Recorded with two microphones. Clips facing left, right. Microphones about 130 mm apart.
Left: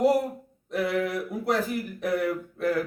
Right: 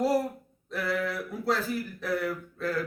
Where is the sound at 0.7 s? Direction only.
20° left (ahead or behind).